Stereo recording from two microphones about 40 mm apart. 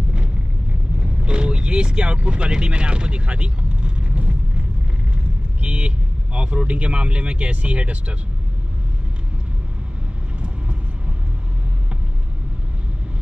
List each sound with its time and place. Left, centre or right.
0.9 s vehicle: right
5.1 s speech: right